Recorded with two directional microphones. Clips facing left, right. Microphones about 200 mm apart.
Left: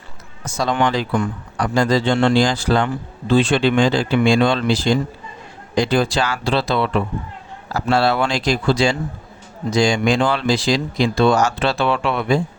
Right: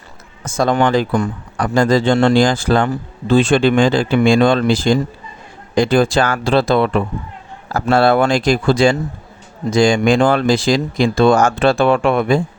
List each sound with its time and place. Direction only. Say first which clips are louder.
0.4 s speech: right 4 dB; 50° right (ahead or behind)